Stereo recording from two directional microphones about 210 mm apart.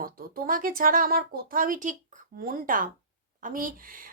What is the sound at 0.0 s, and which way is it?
A woman's voice, 45° right (ahead or behind).